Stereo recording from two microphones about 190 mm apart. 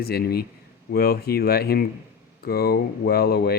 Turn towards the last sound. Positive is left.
turn(degrees=55)  # may be behind; listen again after turning